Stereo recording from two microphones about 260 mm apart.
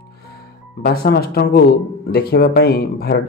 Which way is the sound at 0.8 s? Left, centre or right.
Left.